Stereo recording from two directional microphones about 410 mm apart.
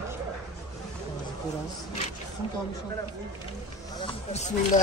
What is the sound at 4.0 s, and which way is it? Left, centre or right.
Speech, centre.